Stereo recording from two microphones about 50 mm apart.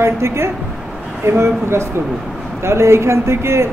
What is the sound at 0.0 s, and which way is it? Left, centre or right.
Speech, right.